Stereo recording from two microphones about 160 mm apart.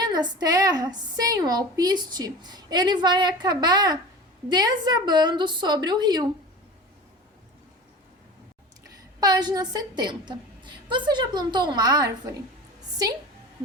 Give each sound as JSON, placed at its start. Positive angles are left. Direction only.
{"t": 0.0, "sound": "a woman's voice", "side_deg": -25}
{"t": 9.2, "sound": "a woman's voice", "side_deg": -25}